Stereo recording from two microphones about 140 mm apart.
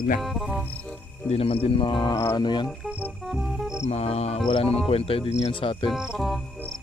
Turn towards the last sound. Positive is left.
turn(degrees=0)  # may be behind; listen again after turning